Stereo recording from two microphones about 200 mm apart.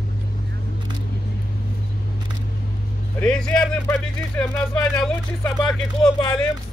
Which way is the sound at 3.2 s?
5° left (ahead or behind).